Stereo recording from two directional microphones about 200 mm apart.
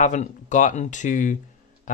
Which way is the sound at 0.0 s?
40° left (ahead or behind).